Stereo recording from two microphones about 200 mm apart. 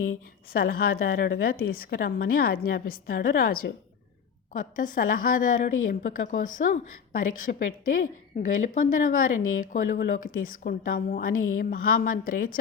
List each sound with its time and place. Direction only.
0.1 s a woman's voice: 50° left (ahead or behind)